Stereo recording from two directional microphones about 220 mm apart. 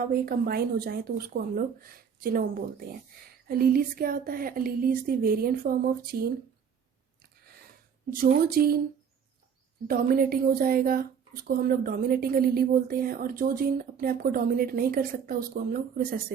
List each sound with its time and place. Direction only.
0.0 s a woman's voice: 45° right (ahead or behind)
8.1 s speech: 40° right (ahead or behind)
9.8 s a woman's voice: 40° right (ahead or behind)